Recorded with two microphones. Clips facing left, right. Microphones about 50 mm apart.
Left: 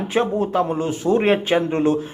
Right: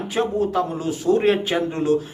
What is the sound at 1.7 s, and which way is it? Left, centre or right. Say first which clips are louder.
Speech: left 2 dB; left.